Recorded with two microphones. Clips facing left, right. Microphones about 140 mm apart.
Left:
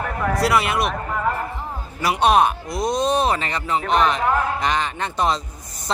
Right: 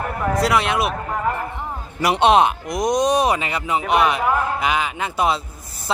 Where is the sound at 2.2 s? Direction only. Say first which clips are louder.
Right 1 dB; 20° right (ahead or behind).